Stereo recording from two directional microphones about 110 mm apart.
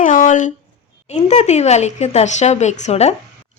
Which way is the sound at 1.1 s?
90° left.